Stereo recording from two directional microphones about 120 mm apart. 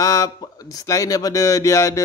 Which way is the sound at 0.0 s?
30° left (ahead or behind).